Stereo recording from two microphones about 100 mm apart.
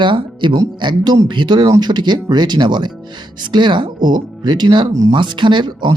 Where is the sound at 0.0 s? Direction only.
50° right (ahead or behind).